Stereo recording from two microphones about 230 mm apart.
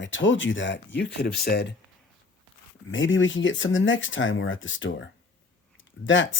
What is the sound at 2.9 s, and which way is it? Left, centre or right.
Speech, left.